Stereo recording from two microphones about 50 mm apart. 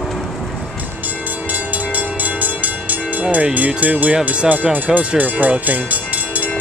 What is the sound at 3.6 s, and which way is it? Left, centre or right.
Speech, right.